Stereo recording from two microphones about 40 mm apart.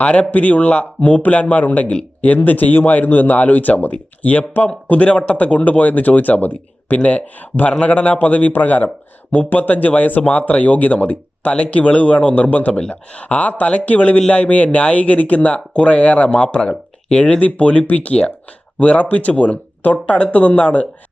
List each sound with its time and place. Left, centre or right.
0.0 s a man's voice: left
7.7 s speech: left
14.2 s a man's voice: left
14.4 s speech: left
17.4 s speech: left